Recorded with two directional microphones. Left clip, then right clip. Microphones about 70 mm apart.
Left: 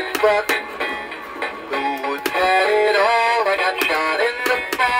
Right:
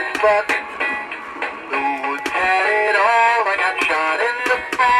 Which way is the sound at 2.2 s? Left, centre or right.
Left.